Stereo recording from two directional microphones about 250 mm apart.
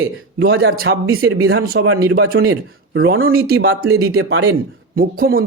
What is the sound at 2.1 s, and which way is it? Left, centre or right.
A man's voice, right.